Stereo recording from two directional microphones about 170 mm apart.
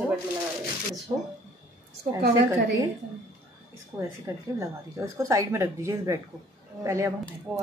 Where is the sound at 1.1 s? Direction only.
20° right (ahead or behind).